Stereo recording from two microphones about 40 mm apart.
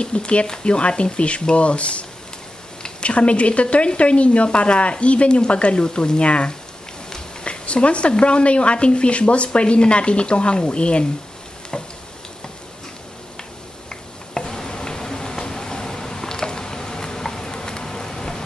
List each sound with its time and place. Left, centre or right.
0.0 s a woman's voice: left
11.7 s tick-tock: left
13.8 s a sound: centre